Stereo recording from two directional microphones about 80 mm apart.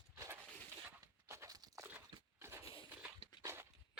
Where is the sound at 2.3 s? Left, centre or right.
Right.